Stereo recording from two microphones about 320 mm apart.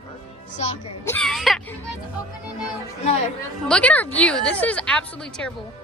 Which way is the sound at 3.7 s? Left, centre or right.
Centre.